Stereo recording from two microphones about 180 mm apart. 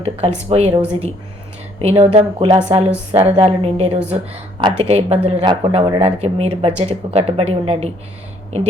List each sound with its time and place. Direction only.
0.0 s speech: 35° right (ahead or behind)